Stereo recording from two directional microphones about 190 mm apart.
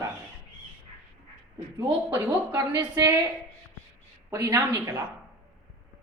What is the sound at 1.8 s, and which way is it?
A woman's voice, 15° right (ahead or behind).